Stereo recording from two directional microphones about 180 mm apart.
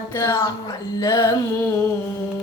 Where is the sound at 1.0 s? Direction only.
20° left (ahead or behind).